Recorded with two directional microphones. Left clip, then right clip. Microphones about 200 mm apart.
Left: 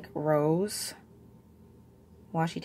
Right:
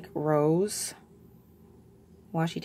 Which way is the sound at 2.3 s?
10° right (ahead or behind).